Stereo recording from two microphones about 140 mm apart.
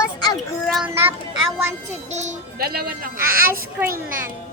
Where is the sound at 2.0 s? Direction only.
55° right (ahead or behind); by 4.2 s 90° right.